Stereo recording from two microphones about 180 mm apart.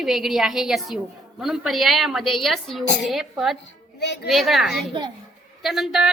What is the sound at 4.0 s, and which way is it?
Speech, 65° left (ahead or behind).